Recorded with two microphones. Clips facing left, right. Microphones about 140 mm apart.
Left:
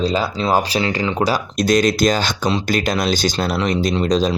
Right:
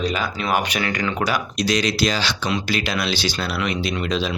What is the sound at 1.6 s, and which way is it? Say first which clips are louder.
Speech: left 6 dB; 50° left (ahead or behind).